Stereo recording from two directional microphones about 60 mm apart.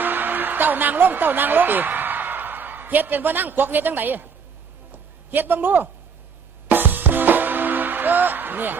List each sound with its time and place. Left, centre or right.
0.0 s a woman's voice: right
4.9 s a sound: right
6.7 s music: right